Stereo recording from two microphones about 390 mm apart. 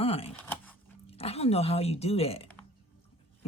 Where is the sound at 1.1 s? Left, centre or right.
Centre.